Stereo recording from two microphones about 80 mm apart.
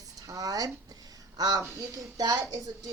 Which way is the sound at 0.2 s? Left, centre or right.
Right.